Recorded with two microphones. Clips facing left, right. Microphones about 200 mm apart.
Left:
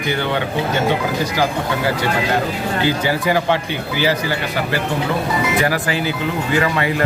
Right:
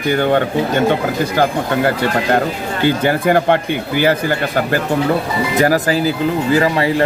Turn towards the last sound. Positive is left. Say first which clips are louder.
# right 4 dB
turn(degrees=-30)  # may be behind; listen again after turning